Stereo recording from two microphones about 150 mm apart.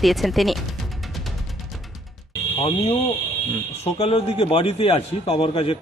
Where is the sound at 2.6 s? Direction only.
40° left (ahead or behind).